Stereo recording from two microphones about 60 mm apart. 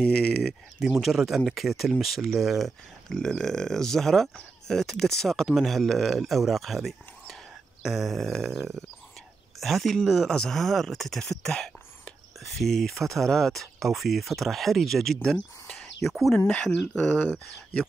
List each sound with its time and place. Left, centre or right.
0.0 s speech: centre
1.0 s speech: centre
3.1 s speech: centre
15.3 s speech: centre
16.0 s speech: centre
16.3 s speech: left